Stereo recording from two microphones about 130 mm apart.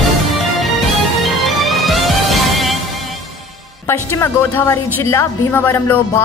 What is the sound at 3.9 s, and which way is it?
A woman's voice, 20° left (ahead or behind).